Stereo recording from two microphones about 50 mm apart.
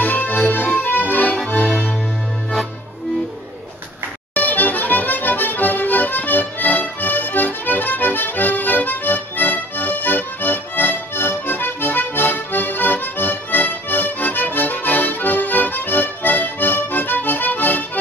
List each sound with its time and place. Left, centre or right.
0.0 s accordion: left
1.5 s music: left
4.4 s accordion: left